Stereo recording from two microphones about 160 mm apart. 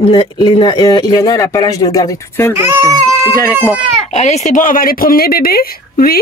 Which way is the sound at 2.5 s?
20° right (ahead or behind).